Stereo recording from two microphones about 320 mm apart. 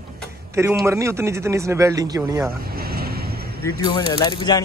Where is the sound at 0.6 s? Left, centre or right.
Centre.